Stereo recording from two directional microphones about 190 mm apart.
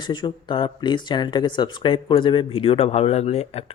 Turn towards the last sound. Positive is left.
turn(degrees=35)  # may be behind; listen again after turning